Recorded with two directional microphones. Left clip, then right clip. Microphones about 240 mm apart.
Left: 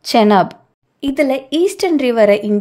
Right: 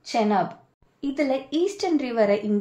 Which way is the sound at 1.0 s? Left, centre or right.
Left.